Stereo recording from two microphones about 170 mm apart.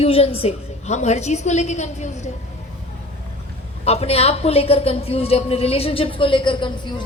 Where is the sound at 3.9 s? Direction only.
35° left (ahead or behind).